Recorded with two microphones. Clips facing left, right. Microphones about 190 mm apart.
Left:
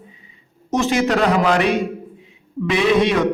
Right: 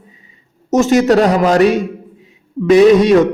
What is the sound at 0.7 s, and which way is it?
A man's voice, 45° right (ahead or behind).